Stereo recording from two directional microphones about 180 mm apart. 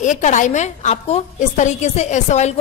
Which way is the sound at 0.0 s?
45° left (ahead or behind).